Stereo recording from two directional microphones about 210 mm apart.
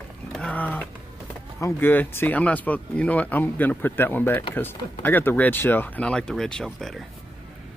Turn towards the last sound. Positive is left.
turn(degrees=0)  # may be behind; listen again after turning